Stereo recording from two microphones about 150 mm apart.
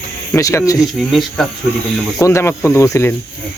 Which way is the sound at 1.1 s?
Centre (ahead or behind).